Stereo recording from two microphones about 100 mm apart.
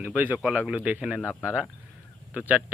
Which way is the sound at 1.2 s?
20° left (ahead or behind).